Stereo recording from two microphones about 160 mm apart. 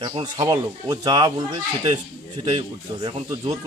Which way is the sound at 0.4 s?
20° right (ahead or behind).